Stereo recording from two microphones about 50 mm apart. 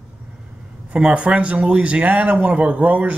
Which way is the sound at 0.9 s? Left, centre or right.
Right.